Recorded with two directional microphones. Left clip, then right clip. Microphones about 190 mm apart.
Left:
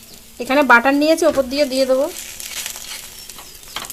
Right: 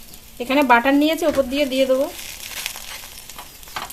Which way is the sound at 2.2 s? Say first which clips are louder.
Left 1 dB; centre (ahead or behind).